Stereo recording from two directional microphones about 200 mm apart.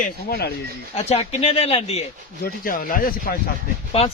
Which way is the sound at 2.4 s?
45° left (ahead or behind).